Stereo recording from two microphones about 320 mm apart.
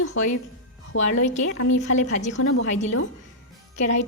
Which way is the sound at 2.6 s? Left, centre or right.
Left.